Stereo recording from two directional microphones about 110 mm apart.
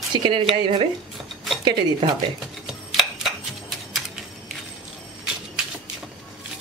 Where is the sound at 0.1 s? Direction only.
45° right (ahead or behind).